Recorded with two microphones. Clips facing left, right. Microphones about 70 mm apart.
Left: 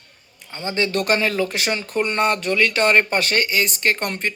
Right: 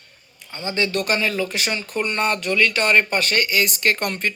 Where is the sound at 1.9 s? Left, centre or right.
Left.